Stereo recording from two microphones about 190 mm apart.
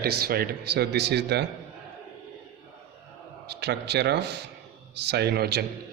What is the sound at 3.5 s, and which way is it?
Speech, 60° right (ahead or behind).